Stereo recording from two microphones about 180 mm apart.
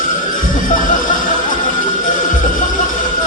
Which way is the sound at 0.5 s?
45° left (ahead or behind).